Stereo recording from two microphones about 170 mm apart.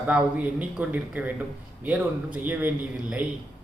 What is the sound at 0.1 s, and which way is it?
A man's voice, 10° right (ahead or behind).